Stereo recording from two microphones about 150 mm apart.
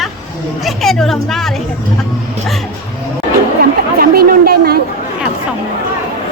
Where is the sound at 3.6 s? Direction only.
80° right.